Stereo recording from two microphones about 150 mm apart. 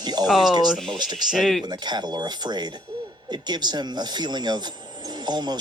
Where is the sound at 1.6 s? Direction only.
30° right (ahead or behind).